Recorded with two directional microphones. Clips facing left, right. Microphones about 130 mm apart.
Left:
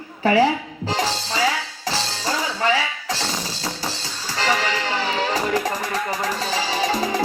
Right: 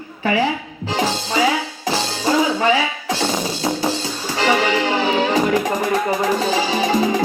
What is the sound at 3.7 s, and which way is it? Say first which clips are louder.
Music: right 10 dB; 25° right (ahead or behind).